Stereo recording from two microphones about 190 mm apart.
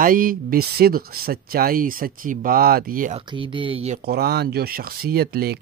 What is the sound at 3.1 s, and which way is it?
Speech, 25° right (ahead or behind).